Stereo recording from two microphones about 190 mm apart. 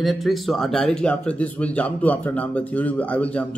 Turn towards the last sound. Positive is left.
turn(degrees=5)  # may be behind; listen again after turning